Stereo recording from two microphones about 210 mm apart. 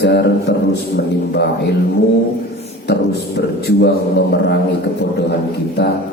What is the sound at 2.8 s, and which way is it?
A man's voice, 50° left (ahead or behind).